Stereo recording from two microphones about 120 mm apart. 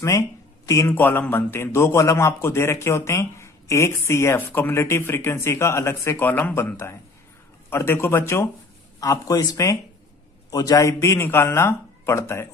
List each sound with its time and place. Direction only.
0.0 s speech: 25° left (ahead or behind)